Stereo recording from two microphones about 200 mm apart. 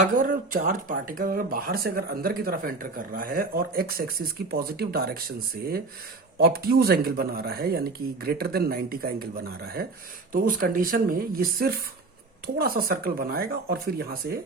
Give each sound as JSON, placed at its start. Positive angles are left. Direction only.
{"t": 0.0, "sound": "speech", "side_deg": -45}
{"t": 6.4, "sound": "speech", "side_deg": -50}